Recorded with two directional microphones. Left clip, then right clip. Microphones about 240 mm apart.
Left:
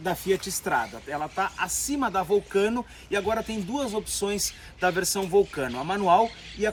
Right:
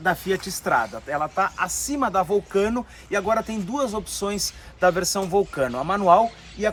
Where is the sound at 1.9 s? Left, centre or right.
Centre.